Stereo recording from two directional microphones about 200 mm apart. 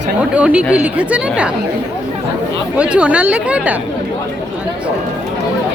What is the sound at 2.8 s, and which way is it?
Speech, 5° right (ahead or behind).